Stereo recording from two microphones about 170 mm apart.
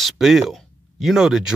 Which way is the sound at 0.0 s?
Centre (ahead or behind).